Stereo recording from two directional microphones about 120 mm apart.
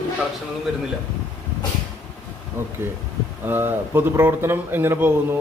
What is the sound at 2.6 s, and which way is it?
Speech, 20° right (ahead or behind).